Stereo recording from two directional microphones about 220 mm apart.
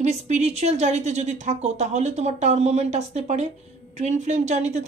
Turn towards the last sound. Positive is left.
turn(degrees=-30)  # may be behind; listen again after turning